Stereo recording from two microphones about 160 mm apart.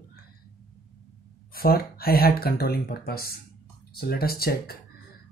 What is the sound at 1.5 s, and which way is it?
Speech, 70° left (ahead or behind).